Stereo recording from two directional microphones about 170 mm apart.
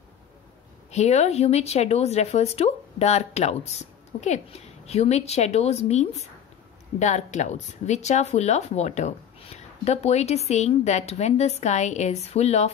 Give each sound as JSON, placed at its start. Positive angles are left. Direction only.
{"t": 0.9, "sound": "speech", "side_deg": 40}